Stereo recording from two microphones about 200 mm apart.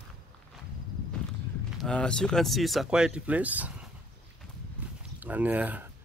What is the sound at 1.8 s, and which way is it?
Speech, 5° left (ahead or behind).